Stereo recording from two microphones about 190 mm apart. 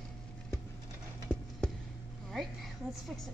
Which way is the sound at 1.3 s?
10° right (ahead or behind).